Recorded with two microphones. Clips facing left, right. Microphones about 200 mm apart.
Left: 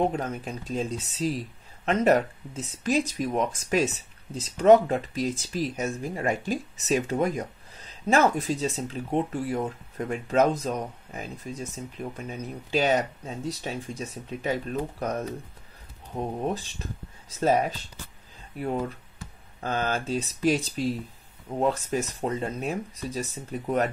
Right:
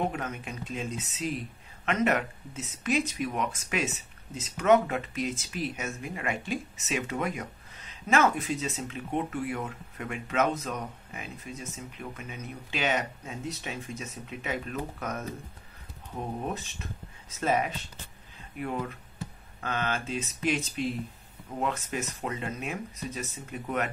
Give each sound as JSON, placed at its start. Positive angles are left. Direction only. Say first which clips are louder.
{"t": 0.1, "sound": "speech", "louder": "left 5 dB", "side_deg": 35}
{"t": 16.4, "sound": "speech", "louder": "left 5 dB", "side_deg": 35}
{"t": 19.6, "sound": "speech", "louder": "left 4 dB", "side_deg": 35}